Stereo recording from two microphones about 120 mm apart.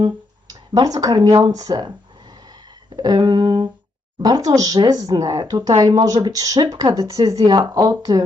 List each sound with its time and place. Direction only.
0.7 s speech: 35° right (ahead or behind)
2.5 s a sound: 35° right (ahead or behind)
4.2 s speech: 30° right (ahead or behind)